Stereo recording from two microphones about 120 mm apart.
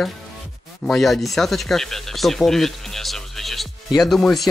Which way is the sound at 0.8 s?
Centre (ahead or behind).